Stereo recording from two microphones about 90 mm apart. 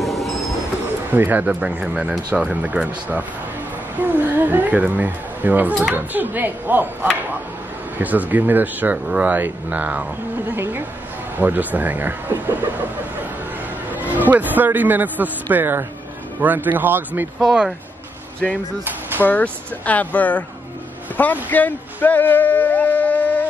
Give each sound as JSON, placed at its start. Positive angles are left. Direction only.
{"t": 0.0, "sound": "music", "side_deg": 0}
{"t": 1.1, "sound": "speech", "side_deg": -20}
{"t": 13.9, "sound": "a man's voice", "side_deg": -20}
{"t": 17.4, "sound": "speech", "side_deg": -5}
{"t": 18.9, "sound": "a sound", "side_deg": -20}
{"t": 19.2, "sound": "speech", "side_deg": 20}